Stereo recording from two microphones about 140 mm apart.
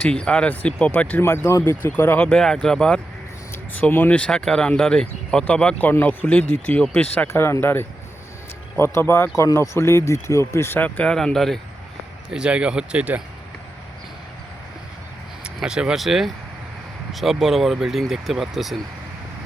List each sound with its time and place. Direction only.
0.0 s speech: 5° left (ahead or behind); by 13.2 s 10° right (ahead or behind)
15.4 s speech: 5° right (ahead or behind)